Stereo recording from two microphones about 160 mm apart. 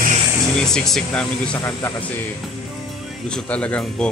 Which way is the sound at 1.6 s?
15° left (ahead or behind).